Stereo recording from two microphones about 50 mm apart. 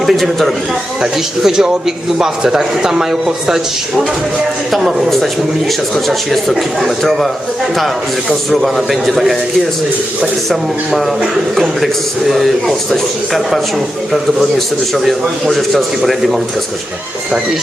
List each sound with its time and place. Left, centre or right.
0.0 s speech: centre
1.0 s a man's voice: centre
8.3 s speech: centre
10.5 s speech: centre
14.9 s speech: centre